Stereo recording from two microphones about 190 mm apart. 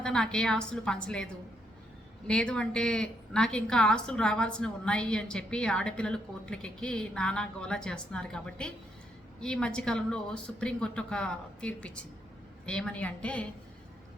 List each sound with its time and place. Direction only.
0.0 s a woman's voice: 5° left (ahead or behind)